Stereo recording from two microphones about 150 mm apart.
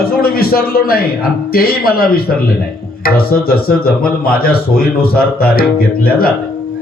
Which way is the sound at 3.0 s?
85° left.